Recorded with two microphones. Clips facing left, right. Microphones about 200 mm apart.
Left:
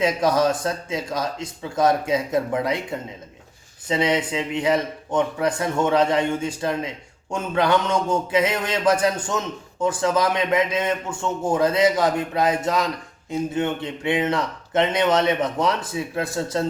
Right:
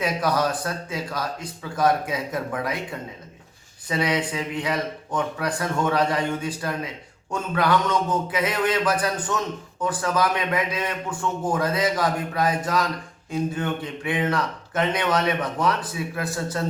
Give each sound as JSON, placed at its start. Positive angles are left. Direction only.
{"t": 0.0, "sound": "speech", "side_deg": 25}
{"t": 3.8, "sound": "speech", "side_deg": 25}